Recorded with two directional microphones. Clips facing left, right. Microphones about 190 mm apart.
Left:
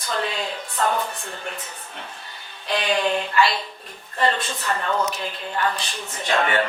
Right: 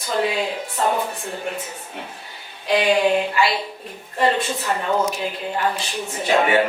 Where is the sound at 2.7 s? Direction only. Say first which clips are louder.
Right 5 dB; 10° right (ahead or behind).